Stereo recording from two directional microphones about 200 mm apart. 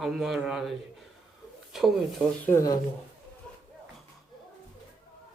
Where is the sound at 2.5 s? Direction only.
20° left (ahead or behind).